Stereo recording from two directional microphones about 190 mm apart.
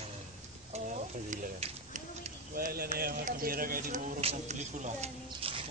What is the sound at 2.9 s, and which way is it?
Speech, 50° right (ahead or behind).